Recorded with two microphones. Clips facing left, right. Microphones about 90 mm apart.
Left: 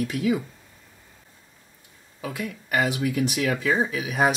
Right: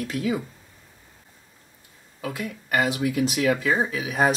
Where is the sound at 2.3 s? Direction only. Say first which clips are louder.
Even; centre (ahead or behind).